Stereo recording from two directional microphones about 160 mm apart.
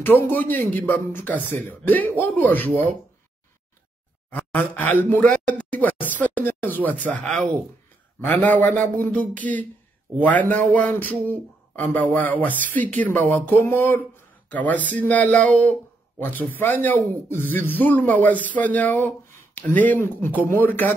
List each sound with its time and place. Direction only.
0.0 s speech: 10° left (ahead or behind)
4.3 s speech: 10° left (ahead or behind)
7.0 s speech: 50° right (ahead or behind)
8.3 s speech: 10° left (ahead or behind)
10.7 s a sound: 10° left (ahead or behind)
11.9 s speech: 10° left (ahead or behind)